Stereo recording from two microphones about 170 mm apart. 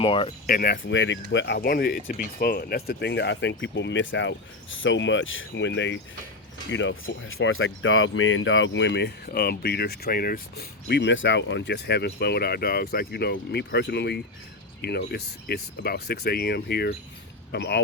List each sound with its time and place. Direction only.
0.0 s speech: 30° left (ahead or behind)
0.4 s speech: 60° left (ahead or behind); by 7.5 s 90° left
8.6 s speech: 90° left